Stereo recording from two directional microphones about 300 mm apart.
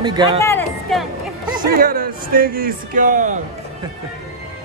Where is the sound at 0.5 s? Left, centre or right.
Centre.